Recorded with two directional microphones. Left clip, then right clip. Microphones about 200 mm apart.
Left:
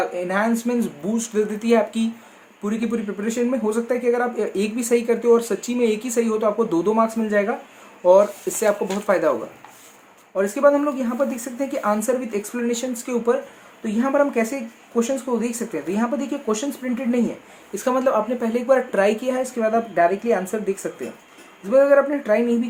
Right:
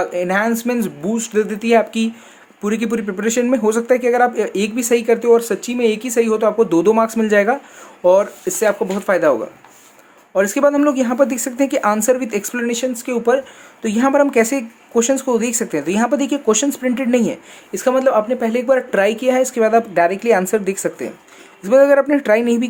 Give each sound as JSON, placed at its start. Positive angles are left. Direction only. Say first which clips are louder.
{"t": 0.2, "sound": "speech", "louder": "right 5 dB", "side_deg": -40}
{"t": 10.3, "sound": "speech", "louder": "right 3 dB", "side_deg": -45}
{"t": 13.8, "sound": "speech", "louder": "right 5 dB", "side_deg": -45}
{"t": 17.7, "sound": "speech", "louder": "right 5 dB", "side_deg": -30}